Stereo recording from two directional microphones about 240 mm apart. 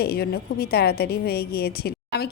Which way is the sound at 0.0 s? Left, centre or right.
Left.